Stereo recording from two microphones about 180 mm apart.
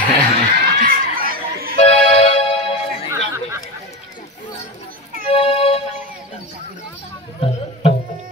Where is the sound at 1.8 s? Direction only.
35° left (ahead or behind).